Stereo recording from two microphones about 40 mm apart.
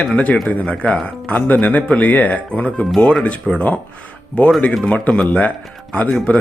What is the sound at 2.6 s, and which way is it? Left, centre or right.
Speech, left.